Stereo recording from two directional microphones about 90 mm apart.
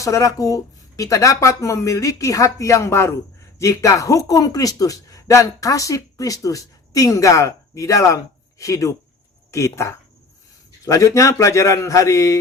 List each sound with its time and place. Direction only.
0.0 s speech: 35° left (ahead or behind)